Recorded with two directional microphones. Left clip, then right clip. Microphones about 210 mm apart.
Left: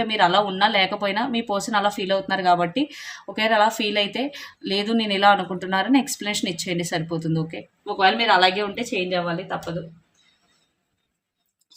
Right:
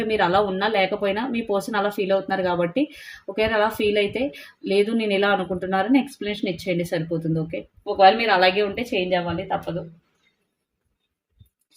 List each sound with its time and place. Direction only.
0.0 s speech: 25° left (ahead or behind)